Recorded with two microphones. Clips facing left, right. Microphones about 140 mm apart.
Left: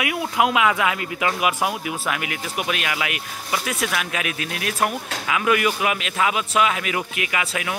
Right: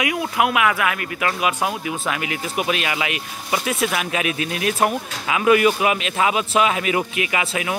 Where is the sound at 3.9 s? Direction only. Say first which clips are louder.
Right 3 dB; 25° right (ahead or behind).